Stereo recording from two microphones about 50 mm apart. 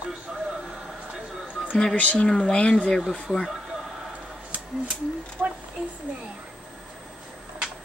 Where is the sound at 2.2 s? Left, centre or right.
Centre.